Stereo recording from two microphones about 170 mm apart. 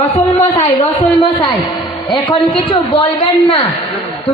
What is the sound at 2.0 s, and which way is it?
Speech, 30° left (ahead or behind).